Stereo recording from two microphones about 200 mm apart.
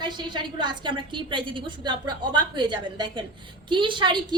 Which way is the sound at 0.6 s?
25° right (ahead or behind).